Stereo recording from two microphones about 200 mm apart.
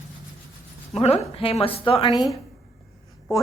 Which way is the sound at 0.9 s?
30° left (ahead or behind).